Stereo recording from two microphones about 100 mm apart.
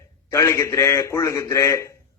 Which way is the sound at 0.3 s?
25° left (ahead or behind).